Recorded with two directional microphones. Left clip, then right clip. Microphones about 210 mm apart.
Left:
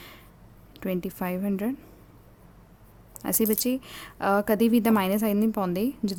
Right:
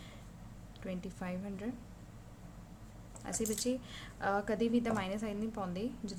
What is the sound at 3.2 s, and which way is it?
A woman's voice, 50° left (ahead or behind).